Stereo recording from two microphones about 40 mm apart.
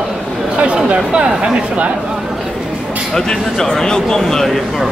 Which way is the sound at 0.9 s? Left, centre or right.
Centre.